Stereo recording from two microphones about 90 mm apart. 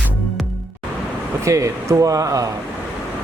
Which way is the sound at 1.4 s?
35° right (ahead or behind).